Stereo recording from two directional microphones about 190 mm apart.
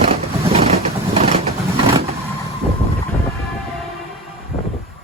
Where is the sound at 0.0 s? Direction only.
30° right (ahead or behind).